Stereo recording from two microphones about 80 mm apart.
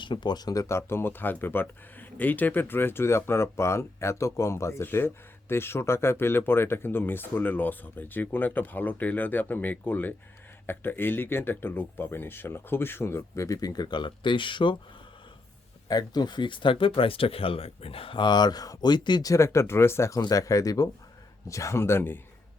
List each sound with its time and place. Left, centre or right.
0.0 s speech: left
15.9 s speech: left
18.1 s speech: left
19.2 s speech: left